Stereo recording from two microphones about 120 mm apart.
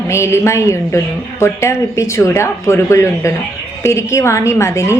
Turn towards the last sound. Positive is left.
turn(degrees=25)  # may be behind; listen again after turning